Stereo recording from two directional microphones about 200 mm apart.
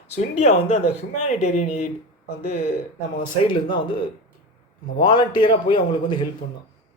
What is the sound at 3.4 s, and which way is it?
Speech, 25° left (ahead or behind).